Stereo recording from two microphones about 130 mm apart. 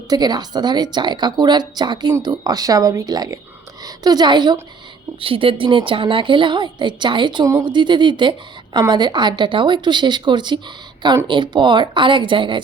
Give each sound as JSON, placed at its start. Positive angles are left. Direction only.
{"t": 0.1, "sound": "a woman's voice", "side_deg": -30}
{"t": 5.2, "sound": "a woman's voice", "side_deg": -45}